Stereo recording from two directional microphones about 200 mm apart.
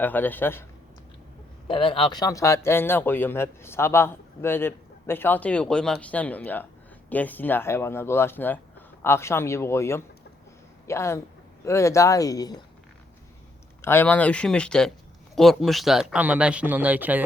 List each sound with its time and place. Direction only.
0.0 s speech: 10° left (ahead or behind)
1.6 s speech: 25° left (ahead or behind)
13.8 s speech: 10° left (ahead or behind); by 17.2 s 10° right (ahead or behind)